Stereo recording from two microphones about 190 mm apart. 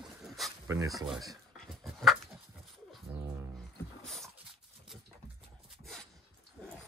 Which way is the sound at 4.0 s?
Centre (ahead or behind).